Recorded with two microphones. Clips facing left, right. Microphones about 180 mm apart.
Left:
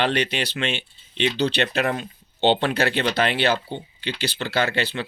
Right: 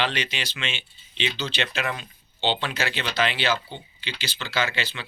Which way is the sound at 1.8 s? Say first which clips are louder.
Left 6 dB; 45° left (ahead or behind).